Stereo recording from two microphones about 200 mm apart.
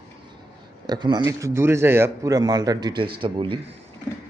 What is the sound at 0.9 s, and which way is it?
Speech, 20° right (ahead or behind).